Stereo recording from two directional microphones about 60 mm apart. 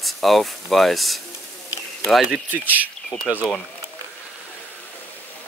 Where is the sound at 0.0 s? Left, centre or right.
Centre.